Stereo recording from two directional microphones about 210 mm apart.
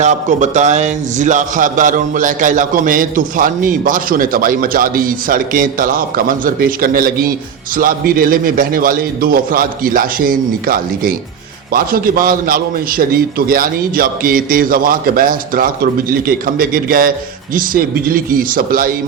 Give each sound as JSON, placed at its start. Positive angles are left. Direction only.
{"t": 0.0, "sound": "a man's voice", "side_deg": -35}